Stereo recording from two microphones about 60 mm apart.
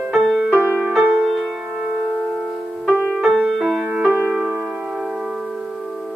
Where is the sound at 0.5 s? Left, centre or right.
Left.